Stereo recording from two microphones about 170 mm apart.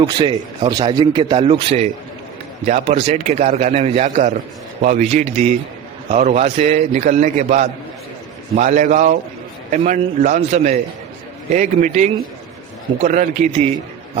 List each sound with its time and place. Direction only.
0.0 s a man's voice: 30° right (ahead or behind); by 13.5 s 45° right (ahead or behind)